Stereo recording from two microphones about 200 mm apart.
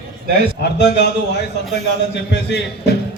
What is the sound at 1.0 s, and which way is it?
A man's voice, 55° left (ahead or behind).